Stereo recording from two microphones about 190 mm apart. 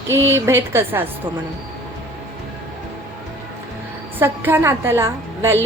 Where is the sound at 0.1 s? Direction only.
15° right (ahead or behind).